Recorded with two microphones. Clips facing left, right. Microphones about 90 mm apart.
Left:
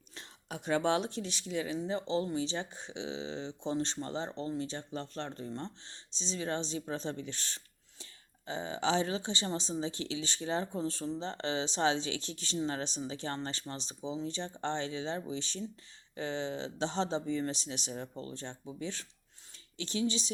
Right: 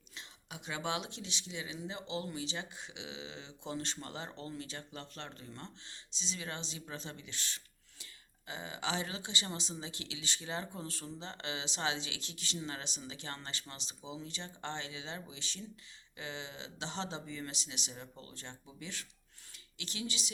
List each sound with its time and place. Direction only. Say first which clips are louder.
0.1 s speech: left 6 dB; 45° left (ahead or behind)